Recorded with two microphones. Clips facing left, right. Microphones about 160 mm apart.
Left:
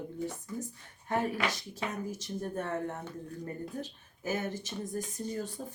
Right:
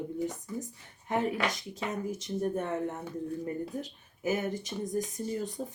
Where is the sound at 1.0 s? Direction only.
20° right (ahead or behind).